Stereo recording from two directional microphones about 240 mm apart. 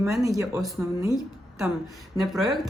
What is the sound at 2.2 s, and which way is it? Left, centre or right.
Speech, centre.